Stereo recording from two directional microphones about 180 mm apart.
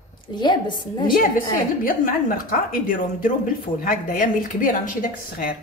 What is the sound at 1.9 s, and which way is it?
A woman's voice, 50° left (ahead or behind).